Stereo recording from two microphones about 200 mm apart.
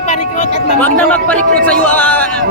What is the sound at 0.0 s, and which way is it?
Music, 35° left (ahead or behind).